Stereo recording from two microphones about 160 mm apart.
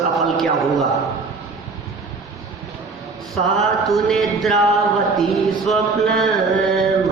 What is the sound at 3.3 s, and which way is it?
A man's voice, centre (ahead or behind).